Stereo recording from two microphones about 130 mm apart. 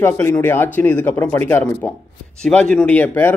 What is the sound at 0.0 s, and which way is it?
A man's voice, 15° left (ahead or behind).